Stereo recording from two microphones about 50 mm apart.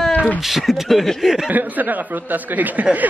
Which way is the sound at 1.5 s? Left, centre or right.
Right.